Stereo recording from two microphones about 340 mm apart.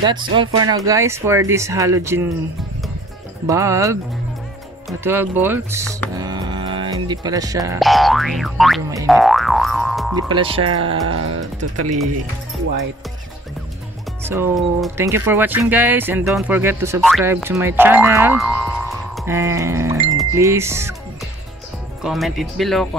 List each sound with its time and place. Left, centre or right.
0.0 s speech: centre
3.4 s speech: centre
6.1 s music: centre
10.1 s speech: centre
10.7 s speech: right
14.2 s speech: centre
22.0 s speech: centre